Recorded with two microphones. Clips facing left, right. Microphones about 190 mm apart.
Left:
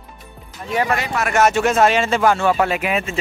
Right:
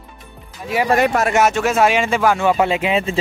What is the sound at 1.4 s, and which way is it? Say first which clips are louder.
Speech: even; 5° right (ahead or behind).